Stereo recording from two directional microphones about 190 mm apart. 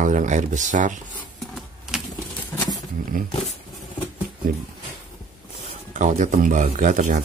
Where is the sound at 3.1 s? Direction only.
45° right (ahead or behind).